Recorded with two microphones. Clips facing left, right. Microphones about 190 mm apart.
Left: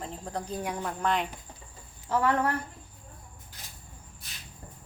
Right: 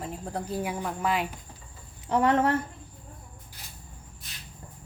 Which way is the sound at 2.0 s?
20° right (ahead or behind).